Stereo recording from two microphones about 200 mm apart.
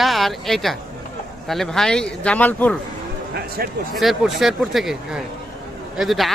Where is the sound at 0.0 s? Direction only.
Centre (ahead or behind).